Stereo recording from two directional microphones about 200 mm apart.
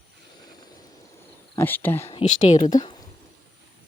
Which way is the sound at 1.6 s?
10° left (ahead or behind).